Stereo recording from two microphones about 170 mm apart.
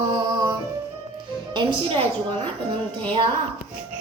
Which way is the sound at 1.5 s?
30° right (ahead or behind).